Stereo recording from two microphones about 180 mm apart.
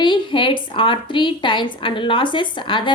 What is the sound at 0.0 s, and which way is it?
A woman's voice, 25° left (ahead or behind).